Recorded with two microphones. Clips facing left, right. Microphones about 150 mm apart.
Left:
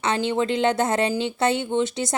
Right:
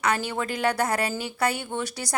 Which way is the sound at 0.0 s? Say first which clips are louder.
Left 4 dB; 25° left (ahead or behind).